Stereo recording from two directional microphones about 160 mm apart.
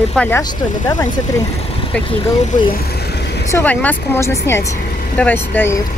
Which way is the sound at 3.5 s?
15° left (ahead or behind).